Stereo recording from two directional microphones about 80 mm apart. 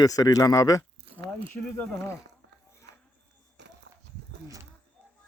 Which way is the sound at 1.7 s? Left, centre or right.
Left.